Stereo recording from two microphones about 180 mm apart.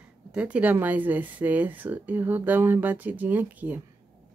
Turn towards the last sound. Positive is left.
turn(degrees=-10)  # may be behind; listen again after turning